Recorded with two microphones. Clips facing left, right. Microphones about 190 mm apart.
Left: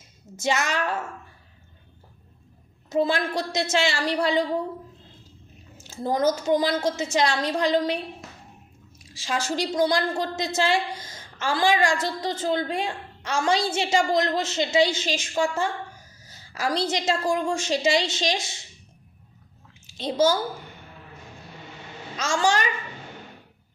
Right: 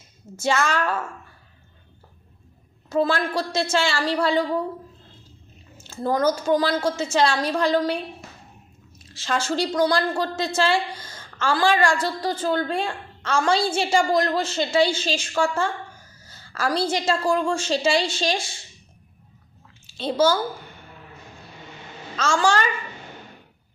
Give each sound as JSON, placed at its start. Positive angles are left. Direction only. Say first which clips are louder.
{"t": 0.3, "sound": "a woman's voice", "louder": "right 3 dB", "side_deg": 20}
{"t": 2.9, "sound": "a woman's voice", "louder": "right 1 dB", "side_deg": 20}
{"t": 5.7, "sound": "a woman's voice", "louder": "right 2 dB", "side_deg": 15}
{"t": 9.0, "sound": "a woman's voice", "louder": "right 3 dB", "side_deg": 10}
{"t": 19.9, "sound": "a child's voice", "louder": "right 1 dB", "side_deg": 15}
{"t": 22.1, "sound": "a woman's voice", "louder": "right 2 dB", "side_deg": 15}